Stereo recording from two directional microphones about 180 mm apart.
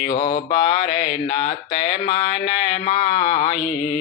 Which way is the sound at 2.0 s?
30° left (ahead or behind).